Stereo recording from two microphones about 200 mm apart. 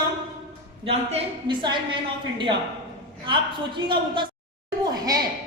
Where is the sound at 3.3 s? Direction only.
25° right (ahead or behind).